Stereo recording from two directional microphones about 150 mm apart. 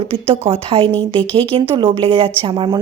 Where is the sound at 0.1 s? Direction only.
40° right (ahead or behind).